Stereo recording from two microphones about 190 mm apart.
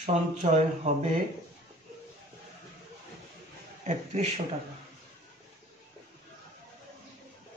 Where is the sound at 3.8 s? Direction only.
40° right (ahead or behind).